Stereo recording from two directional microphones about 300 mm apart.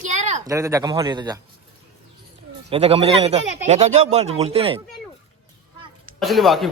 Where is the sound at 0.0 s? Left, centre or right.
Right.